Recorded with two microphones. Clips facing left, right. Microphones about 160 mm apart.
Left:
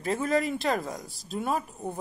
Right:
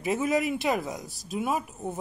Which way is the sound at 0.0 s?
10° right (ahead or behind).